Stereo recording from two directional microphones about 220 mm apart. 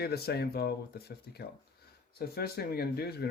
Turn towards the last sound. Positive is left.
turn(degrees=45)  # may be behind; listen again after turning